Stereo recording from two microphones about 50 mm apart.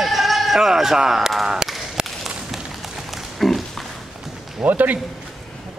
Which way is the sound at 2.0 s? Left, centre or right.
Centre.